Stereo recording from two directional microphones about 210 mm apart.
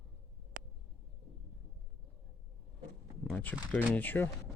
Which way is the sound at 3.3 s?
10° left (ahead or behind).